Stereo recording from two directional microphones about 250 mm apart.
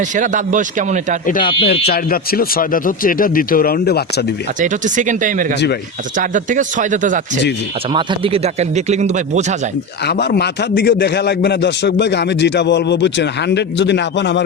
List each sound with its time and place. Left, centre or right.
0.2 s speech: right
1.3 s speech: left
4.6 s speech: right
10.1 s a man's voice: left